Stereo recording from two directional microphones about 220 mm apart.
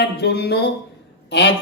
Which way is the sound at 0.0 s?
50° left (ahead or behind).